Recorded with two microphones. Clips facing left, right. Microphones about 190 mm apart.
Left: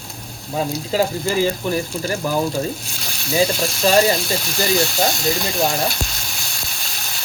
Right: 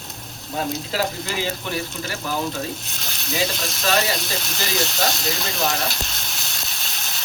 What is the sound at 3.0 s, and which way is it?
Frying, centre (ahead or behind).